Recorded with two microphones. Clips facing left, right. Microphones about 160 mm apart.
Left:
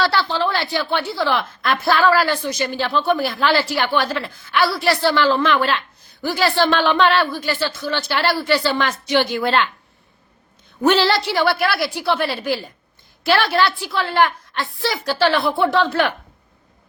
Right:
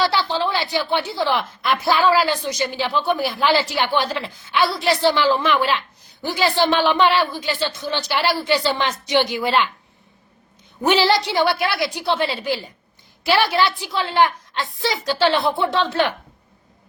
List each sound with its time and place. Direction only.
0.0 s a woman's voice: 15° right (ahead or behind)
10.8 s a woman's voice: 15° right (ahead or behind)